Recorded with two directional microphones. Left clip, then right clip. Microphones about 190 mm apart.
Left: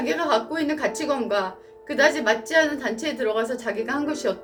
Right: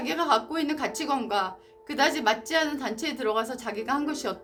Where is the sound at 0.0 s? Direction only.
50° right (ahead or behind).